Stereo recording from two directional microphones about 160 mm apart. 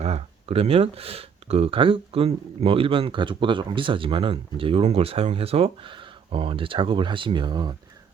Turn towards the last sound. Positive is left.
turn(degrees=-30)  # may be behind; listen again after turning